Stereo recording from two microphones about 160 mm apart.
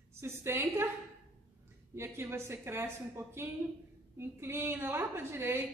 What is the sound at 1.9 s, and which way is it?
A woman's voice, 15° right (ahead or behind).